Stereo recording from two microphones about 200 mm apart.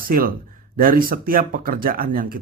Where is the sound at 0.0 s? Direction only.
45° right (ahead or behind).